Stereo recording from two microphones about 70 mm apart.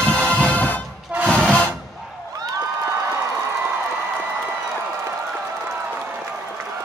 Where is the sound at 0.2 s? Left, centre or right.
Centre.